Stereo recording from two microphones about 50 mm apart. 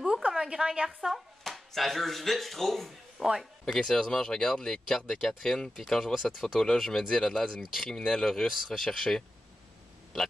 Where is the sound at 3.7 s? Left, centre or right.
Centre.